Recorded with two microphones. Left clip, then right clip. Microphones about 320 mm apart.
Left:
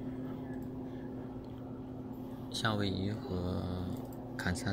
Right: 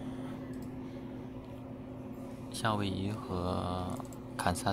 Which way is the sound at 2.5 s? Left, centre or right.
Centre.